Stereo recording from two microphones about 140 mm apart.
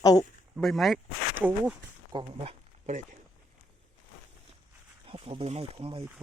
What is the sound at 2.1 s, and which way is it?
Speech, 30° right (ahead or behind).